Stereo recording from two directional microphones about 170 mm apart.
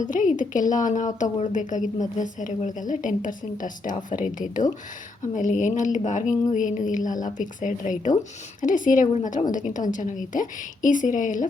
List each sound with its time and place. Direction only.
0.0 s speech: 50° left (ahead or behind)